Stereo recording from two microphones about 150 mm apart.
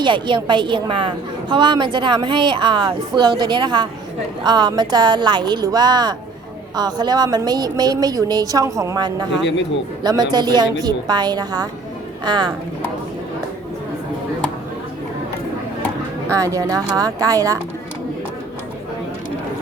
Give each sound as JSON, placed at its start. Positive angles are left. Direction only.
{"t": 0.0, "sound": "a woman's voice", "side_deg": -30}
{"t": 16.3, "sound": "a woman's voice", "side_deg": -20}